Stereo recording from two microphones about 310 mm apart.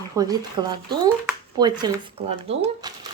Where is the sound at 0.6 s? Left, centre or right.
Centre.